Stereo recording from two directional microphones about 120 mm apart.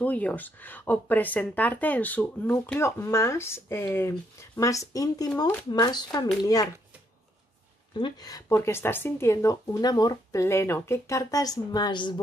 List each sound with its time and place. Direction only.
0.0 s speech: 10° left (ahead or behind); by 6.7 s 30° left (ahead or behind)
8.0 s speech: 30° left (ahead or behind)